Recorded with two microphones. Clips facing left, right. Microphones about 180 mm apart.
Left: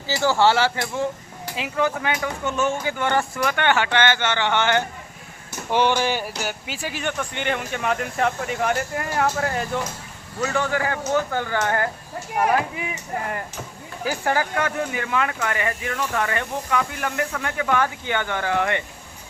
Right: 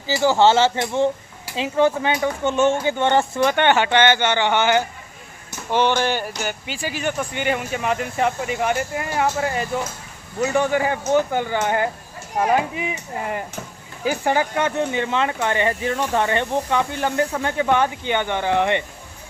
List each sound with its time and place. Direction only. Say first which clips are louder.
0.1 s speech: right 3 dB; 15° right (ahead or behind)
5.7 s speech: right 1 dB; 10° left (ahead or behind)
10.4 s speech: right 4 dB; 15° right (ahead or behind)